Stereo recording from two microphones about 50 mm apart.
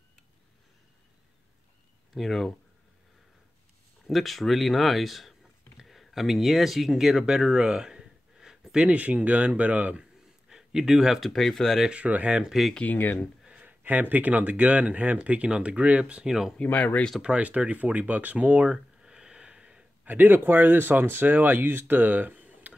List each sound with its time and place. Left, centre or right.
2.1 s speech: centre
4.1 s speech: centre
8.8 s speech: right
10.5 s a sound: centre
11.1 s speech: centre
11.9 s speech: right
12.8 s speech: left
13.5 s speech: right
16.3 s speech: centre
16.6 s speech: left
17.2 s speech: right
18.7 s a sound: centre
20.1 s speech: right